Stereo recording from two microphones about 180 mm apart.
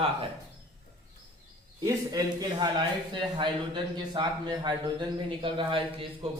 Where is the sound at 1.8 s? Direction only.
20° right (ahead or behind).